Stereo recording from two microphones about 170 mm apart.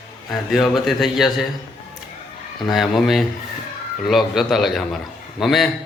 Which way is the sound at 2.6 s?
Centre (ahead or behind).